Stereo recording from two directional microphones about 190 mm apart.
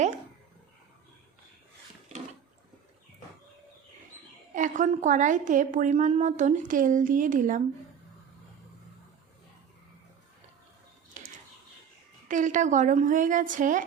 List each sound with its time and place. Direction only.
4.5 s a woman's voice: 40° right (ahead or behind)
11.2 s a sound: 40° right (ahead or behind)
12.3 s a woman's voice: 40° right (ahead or behind)